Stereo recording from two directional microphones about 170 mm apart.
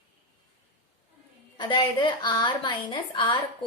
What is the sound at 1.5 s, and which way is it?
A woman's voice, 25° left (ahead or behind).